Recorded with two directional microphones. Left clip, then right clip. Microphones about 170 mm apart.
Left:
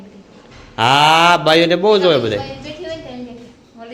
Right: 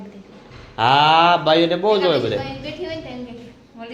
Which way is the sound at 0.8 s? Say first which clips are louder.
Left 3 dB; 35° left (ahead or behind).